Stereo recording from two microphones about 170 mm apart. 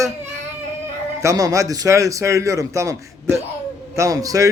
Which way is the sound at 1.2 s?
20° right (ahead or behind).